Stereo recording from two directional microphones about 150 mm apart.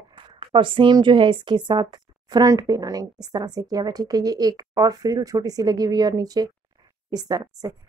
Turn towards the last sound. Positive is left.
turn(degrees=-25)  # may be behind; listen again after turning